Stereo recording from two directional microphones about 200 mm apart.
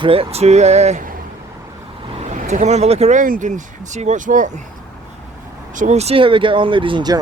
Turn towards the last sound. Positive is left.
turn(degrees=-20)  # may be behind; listen again after turning